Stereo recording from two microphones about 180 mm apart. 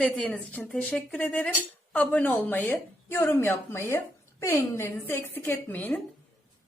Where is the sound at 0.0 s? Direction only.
5° left (ahead or behind).